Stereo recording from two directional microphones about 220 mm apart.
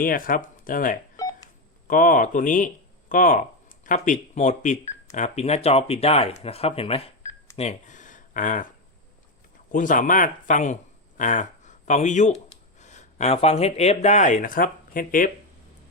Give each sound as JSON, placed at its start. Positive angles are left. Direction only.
{"t": 0.0, "sound": "speech", "side_deg": 40}
{"t": 1.1, "sound": "telephone dialing", "side_deg": 15}
{"t": 1.9, "sound": "speech", "side_deg": 40}
{"t": 7.5, "sound": "a sound", "side_deg": 30}
{"t": 9.7, "sound": "speech", "side_deg": 35}